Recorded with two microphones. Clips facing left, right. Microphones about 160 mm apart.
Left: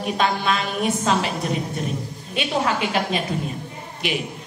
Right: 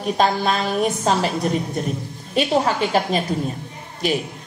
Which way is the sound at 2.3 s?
40° right (ahead or behind).